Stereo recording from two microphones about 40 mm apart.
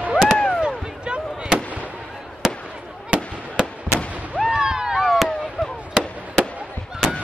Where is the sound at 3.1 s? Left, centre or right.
Right.